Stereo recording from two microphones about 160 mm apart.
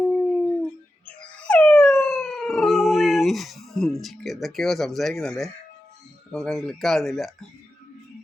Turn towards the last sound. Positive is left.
turn(degrees=0)  # may be behind; listen again after turning